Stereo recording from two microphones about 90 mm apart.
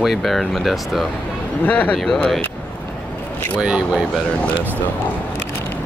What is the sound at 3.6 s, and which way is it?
Speech, 10° right (ahead or behind).